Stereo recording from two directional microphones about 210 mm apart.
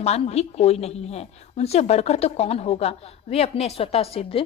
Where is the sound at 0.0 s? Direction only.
30° left (ahead or behind).